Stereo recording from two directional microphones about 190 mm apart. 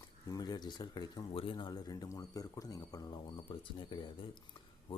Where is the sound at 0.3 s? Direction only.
20° left (ahead or behind).